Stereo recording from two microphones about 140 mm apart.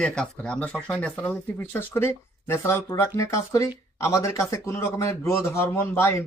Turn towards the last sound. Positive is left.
turn(degrees=20)  # may be behind; listen again after turning